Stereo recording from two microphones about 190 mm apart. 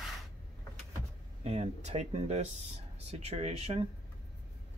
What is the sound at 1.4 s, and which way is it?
Speech, 35° right (ahead or behind).